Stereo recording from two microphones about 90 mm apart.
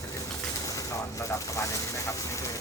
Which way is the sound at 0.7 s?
40° left (ahead or behind).